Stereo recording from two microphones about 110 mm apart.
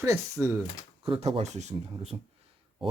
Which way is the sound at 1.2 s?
85° right.